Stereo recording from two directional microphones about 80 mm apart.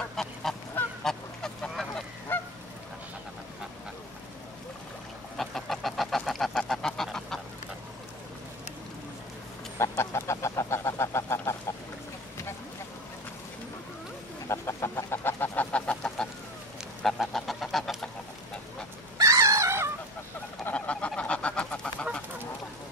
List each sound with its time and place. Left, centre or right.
0.1 s goose: centre
2.3 s goose: left
5.4 s goose: centre
9.8 s goose: left
14.5 s chicken: left; by 16.3 s centre
17.0 s goose: centre
19.1 s dog: right
20.7 s goose: centre